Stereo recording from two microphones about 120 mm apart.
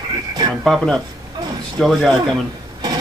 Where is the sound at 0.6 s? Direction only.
Centre (ahead or behind).